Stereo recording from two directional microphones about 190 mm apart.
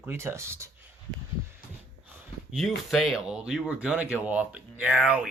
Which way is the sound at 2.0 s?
5° right (ahead or behind).